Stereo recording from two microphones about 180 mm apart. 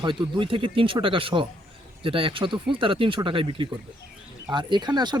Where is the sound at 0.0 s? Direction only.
25° right (ahead or behind).